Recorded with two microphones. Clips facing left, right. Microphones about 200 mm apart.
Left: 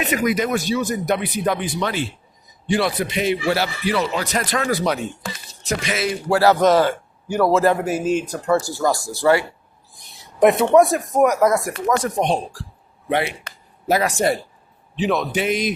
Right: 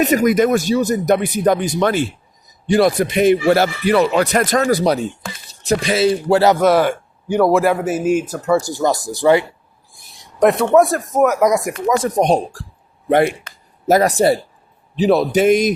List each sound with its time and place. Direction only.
0.0 s speech: 40° right (ahead or behind); by 4.5 s 55° right (ahead or behind)
4.5 s a man's voice: 40° right (ahead or behind); by 6.6 s 20° right (ahead or behind)
6.6 s a man's voice: 10° right (ahead or behind)
8.6 s speech: 20° right (ahead or behind)
10.1 s speech: centre (ahead or behind)
12.0 s a man's voice: 40° right (ahead or behind)